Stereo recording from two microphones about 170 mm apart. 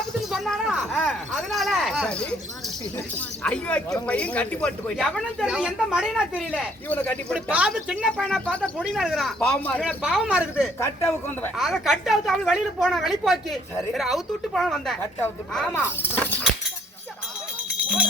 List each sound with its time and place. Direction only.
0.3 s a woman's voice: centre (ahead or behind)
6.8 s speech: 10° left (ahead or behind)
7.3 s a woman's voice: 5° right (ahead or behind)
9.8 s a woman's voice: 5° right (ahead or behind)
10.8 s speech: 15° left (ahead or behind)
11.5 s a woman's voice: centre (ahead or behind)
15.7 s speech: 15° left (ahead or behind)
17.8 s speech: 5° right (ahead or behind)